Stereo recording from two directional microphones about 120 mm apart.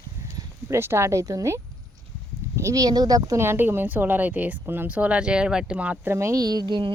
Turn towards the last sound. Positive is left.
turn(degrees=-40)  # may be behind; listen again after turning